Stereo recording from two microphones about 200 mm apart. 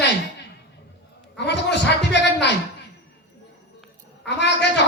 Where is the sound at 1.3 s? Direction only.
60° left (ahead or behind).